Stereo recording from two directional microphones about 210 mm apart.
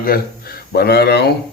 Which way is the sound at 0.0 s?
45° left (ahead or behind).